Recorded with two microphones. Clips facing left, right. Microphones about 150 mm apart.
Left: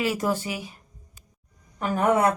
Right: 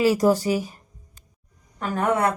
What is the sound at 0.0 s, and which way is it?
Speech, 35° right (ahead or behind).